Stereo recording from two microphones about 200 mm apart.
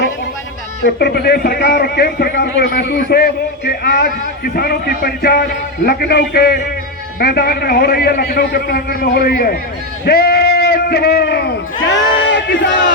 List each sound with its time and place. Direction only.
0.9 s a man's voice: 55° left (ahead or behind)